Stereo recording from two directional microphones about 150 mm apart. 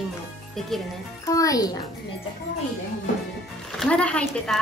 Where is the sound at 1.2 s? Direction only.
20° left (ahead or behind).